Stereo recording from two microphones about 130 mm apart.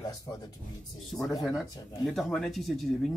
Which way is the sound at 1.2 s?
25° left (ahead or behind).